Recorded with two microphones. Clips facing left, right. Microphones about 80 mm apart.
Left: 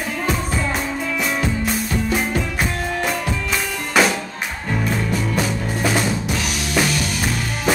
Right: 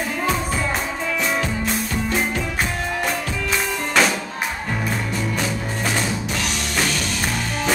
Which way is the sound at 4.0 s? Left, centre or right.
Centre.